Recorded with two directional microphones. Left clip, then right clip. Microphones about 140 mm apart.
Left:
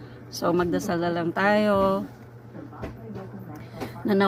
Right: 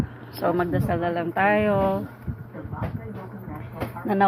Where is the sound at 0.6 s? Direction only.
35° left (ahead or behind).